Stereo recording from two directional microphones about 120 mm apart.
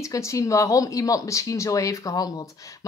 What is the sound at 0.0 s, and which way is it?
Speech, 25° left (ahead or behind).